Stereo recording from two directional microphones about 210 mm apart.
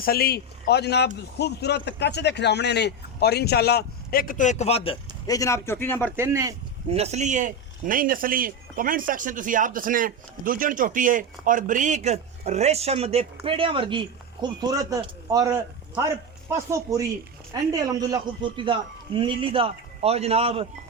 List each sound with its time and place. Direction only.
0.0 s a man's voice: 45° left (ahead or behind); by 4.9 s 30° left (ahead or behind)
5.2 s speech: 15° left (ahead or behind)
6.1 s speech: 15° right (ahead or behind)
6.8 s a man's voice: 30° right (ahead or behind)
16.5 s a man's voice: 15° right (ahead or behind)